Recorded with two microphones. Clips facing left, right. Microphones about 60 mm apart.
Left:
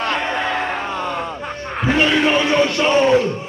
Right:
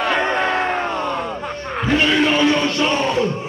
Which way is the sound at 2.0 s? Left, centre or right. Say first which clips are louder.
Even; centre.